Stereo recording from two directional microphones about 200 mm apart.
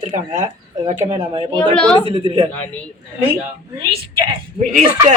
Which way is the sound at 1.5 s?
5° left (ahead or behind).